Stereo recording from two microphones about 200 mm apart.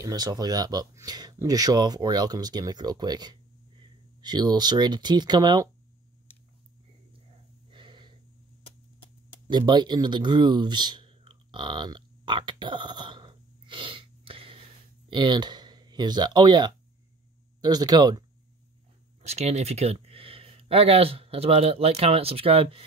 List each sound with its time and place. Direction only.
0.0 s speech: 20° right (ahead or behind)
7.7 s snort: 25° right (ahead or behind)
9.5 s a sound: 20° right (ahead or behind)
15.0 s speech: 25° right (ahead or behind)
19.2 s speech: 35° right (ahead or behind)